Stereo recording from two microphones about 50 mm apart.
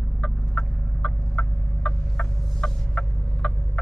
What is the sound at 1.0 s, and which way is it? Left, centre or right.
Fowl, centre.